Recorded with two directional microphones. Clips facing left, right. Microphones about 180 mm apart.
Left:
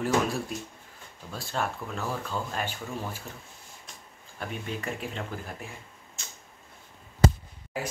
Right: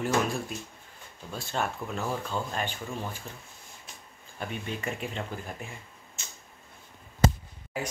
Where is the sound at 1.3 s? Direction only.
Centre (ahead or behind).